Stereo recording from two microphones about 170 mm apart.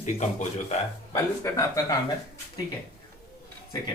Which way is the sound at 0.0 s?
45° left (ahead or behind).